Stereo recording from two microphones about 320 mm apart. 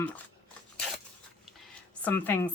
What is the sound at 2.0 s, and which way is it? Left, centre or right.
Speech, centre.